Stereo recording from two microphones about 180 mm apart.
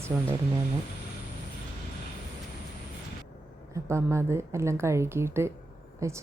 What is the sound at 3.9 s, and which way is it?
Speech, 15° right (ahead or behind).